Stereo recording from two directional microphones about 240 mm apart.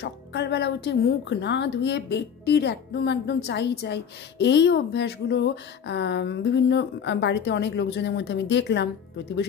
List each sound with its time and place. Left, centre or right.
0.0 s a woman's voice: left